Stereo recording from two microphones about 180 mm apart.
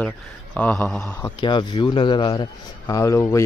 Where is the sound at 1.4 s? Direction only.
25° left (ahead or behind).